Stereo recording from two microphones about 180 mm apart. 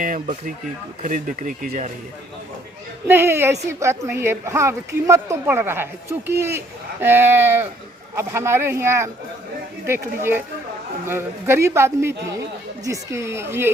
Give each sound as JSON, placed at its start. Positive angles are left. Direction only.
{"t": 1.0, "sound": "speech", "side_deg": -45}
{"t": 3.1, "sound": "speech", "side_deg": -15}